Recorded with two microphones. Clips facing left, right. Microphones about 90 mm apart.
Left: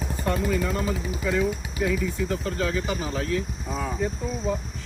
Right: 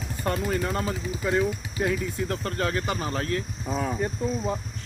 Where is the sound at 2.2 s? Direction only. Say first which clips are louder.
Left 1 dB; 55° right (ahead or behind).